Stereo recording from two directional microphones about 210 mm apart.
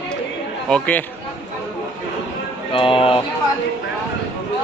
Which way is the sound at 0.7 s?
5° left (ahead or behind).